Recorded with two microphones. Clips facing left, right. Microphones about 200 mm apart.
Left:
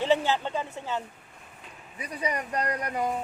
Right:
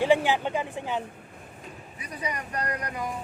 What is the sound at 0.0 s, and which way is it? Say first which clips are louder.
Speech: right 2 dB; 15° right (ahead or behind).